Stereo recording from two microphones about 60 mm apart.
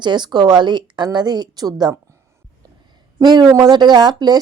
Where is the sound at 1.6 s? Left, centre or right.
Right.